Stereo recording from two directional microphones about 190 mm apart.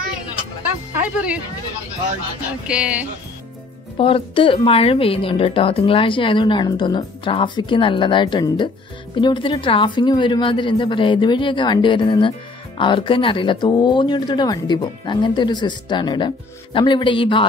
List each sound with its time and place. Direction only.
0.9 s speech: 5° right (ahead or behind)
2.6 s speech: 5° right (ahead or behind)
4.0 s a woman's voice: 30° left (ahead or behind)